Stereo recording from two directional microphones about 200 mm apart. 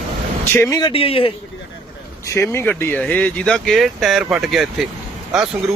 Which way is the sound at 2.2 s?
15° left (ahead or behind).